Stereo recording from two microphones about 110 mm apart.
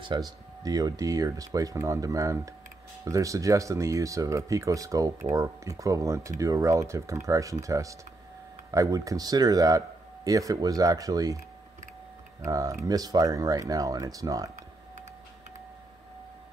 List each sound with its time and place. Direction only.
0.0 s speech: 40° right (ahead or behind)
12.4 s speech: 30° right (ahead or behind)